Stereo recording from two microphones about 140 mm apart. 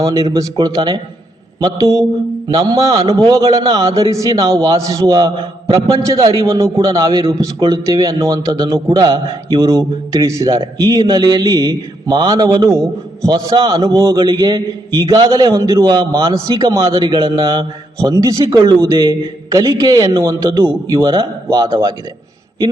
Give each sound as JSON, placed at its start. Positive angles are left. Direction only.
{"t": 0.0, "sound": "a man's voice", "side_deg": -25}